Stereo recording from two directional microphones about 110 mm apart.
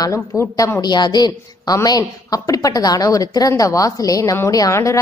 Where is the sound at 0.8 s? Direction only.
40° left (ahead or behind).